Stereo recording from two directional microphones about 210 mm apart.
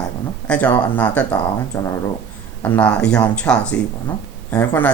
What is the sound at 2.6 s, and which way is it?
Speech, 5° left (ahead or behind).